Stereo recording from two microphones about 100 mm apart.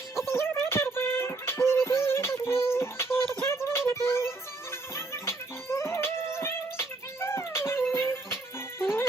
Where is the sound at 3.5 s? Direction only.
25° left (ahead or behind).